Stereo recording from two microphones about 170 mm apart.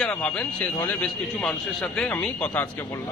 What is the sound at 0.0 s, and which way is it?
A man's voice, 5° left (ahead or behind).